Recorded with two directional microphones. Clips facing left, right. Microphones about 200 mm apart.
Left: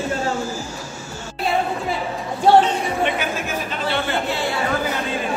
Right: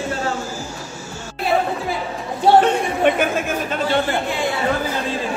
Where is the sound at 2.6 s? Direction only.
50° right (ahead or behind).